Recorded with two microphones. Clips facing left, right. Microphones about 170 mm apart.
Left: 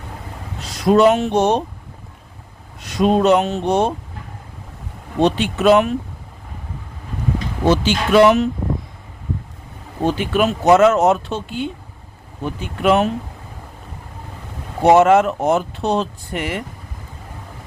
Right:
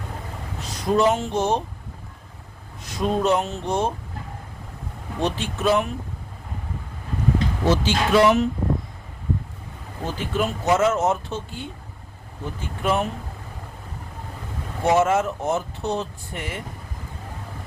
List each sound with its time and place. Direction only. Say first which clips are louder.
0.6 s speech: left 7 dB; 80° left
2.8 s speech: left 7 dB; 80° left
5.2 s speech: left 8 dB; 75° left (ahead or behind)
7.6 s speech: left 6 dB; 75° left (ahead or behind)
10.0 s speech: left 8 dB; 75° left (ahead or behind)
14.8 s speech: left 8 dB; 70° left (ahead or behind)